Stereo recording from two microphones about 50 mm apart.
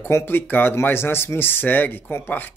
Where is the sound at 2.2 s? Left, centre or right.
Left.